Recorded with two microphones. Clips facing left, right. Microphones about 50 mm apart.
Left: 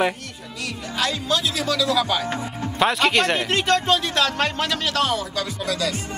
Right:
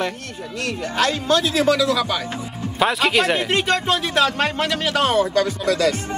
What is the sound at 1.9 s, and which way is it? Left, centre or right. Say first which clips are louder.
Speech: even; centre.